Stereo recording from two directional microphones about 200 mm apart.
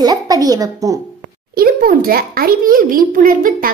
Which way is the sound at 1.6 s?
50° right (ahead or behind).